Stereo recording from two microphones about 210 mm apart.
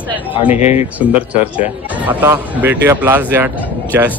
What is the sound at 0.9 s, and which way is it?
Speech, 5° right (ahead or behind).